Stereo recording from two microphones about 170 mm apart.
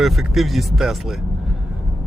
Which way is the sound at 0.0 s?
Centre (ahead or behind).